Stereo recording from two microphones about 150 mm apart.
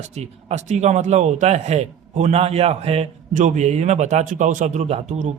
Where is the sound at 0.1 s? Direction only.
50° right (ahead or behind).